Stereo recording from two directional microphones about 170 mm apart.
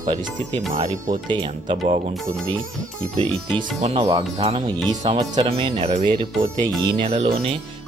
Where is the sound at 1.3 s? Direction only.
30° right (ahead or behind).